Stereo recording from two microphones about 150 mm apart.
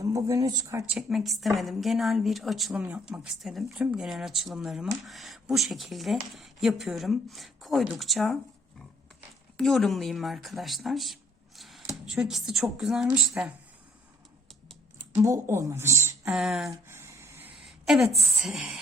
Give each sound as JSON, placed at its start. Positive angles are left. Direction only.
{"t": 0.0, "sound": "speech", "side_deg": -20}
{"t": 0.9, "sound": "speech", "side_deg": 0}
{"t": 9.6, "sound": "speech", "side_deg": 0}
{"t": 15.1, "sound": "speech", "side_deg": -20}
{"t": 16.3, "sound": "speech", "side_deg": -5}
{"t": 16.9, "sound": "a sound", "side_deg": -20}
{"t": 17.7, "sound": "a woman's voice", "side_deg": 0}